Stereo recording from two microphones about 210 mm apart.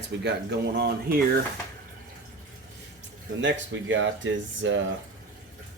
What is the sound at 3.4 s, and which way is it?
Speech, 65° right (ahead or behind).